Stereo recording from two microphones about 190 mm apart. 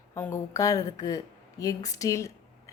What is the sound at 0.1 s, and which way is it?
A woman's voice, 15° left (ahead or behind).